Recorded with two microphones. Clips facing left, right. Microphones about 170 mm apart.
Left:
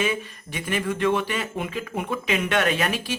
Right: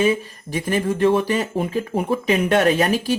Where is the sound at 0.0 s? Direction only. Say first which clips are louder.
Right 7 dB; 35° right (ahead or behind).